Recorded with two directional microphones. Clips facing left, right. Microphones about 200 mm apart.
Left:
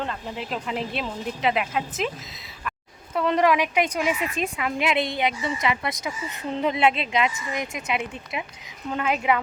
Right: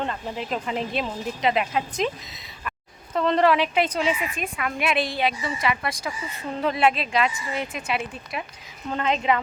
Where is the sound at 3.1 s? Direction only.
10° left (ahead or behind).